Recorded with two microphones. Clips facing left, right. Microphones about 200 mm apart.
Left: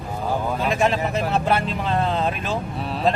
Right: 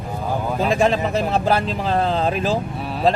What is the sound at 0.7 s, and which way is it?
Speech, 30° right (ahead or behind).